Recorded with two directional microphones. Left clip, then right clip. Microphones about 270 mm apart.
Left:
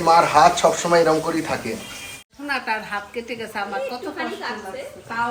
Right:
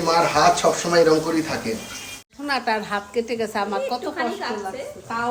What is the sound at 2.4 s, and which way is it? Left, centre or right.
A woman's voice, right.